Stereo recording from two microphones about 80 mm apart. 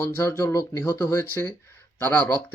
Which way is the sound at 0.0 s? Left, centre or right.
Left.